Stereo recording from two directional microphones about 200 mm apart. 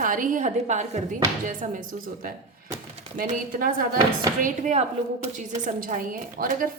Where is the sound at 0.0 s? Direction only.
40° right (ahead or behind).